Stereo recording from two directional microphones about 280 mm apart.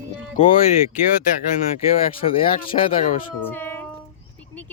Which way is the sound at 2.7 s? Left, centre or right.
Left.